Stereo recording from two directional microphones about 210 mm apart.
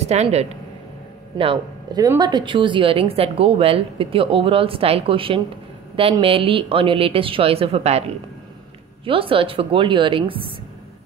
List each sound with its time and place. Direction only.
0.0 s a woman's voice: 30° right (ahead or behind)
9.0 s a woman's voice: 25° right (ahead or behind)